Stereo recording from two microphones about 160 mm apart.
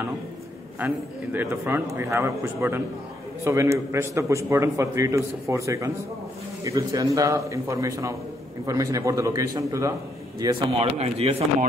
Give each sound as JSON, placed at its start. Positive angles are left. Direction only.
{"t": 0.7, "sound": "a man's voice", "side_deg": -10}
{"t": 10.4, "sound": "speech", "side_deg": -35}